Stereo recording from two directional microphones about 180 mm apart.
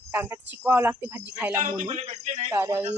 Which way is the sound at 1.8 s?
35° right (ahead or behind).